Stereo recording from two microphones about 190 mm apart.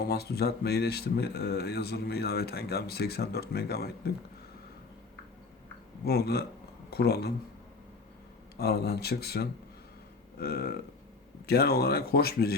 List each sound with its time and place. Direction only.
0.0 s speech: 55° left (ahead or behind)
6.1 s speech: 55° left (ahead or behind)
8.5 s speech: 55° left (ahead or behind)